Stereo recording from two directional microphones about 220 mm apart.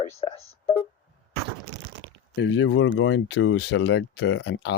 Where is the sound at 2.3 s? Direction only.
55° left (ahead or behind).